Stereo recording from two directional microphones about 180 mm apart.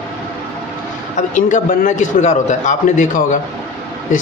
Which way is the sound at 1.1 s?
45° left (ahead or behind).